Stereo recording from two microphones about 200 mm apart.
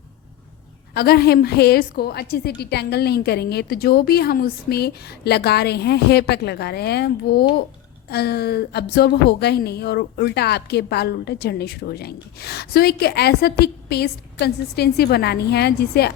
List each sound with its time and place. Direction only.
0.9 s a woman's voice: 50° left (ahead or behind)